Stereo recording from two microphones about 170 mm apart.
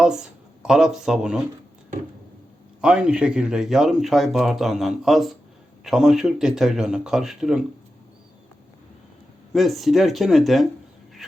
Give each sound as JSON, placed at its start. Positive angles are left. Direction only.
{"t": 0.0, "sound": "speech", "side_deg": -5}
{"t": 2.8, "sound": "speech", "side_deg": -5}
{"t": 9.5, "sound": "speech", "side_deg": 0}
{"t": 11.2, "sound": "a sound", "side_deg": 0}